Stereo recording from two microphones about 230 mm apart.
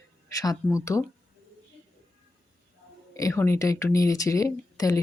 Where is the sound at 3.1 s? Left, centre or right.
Centre.